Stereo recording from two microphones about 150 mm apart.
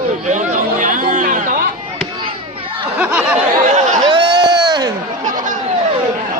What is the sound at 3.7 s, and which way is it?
Chatter, 60° right (ahead or behind).